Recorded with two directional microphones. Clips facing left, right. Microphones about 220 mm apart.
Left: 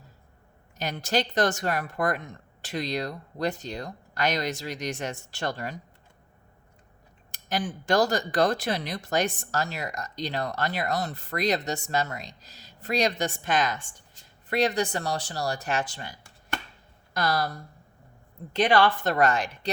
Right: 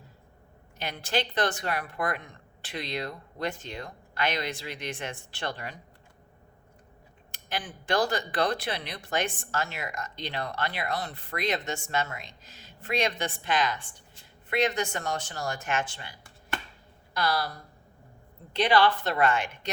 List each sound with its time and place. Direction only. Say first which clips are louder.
0.8 s speech: left 3 dB; 40° left (ahead or behind)
7.3 s speech: left 6 dB; 40° left (ahead or behind)
17.2 s speech: left 2 dB; 45° left (ahead or behind)
18.5 s speech: left 1 dB; 50° left (ahead or behind)